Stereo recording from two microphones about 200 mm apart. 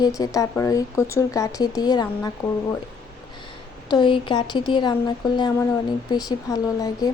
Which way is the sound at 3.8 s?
25° left (ahead or behind).